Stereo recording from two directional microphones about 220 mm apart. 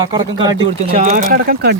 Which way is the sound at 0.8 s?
35° right (ahead or behind).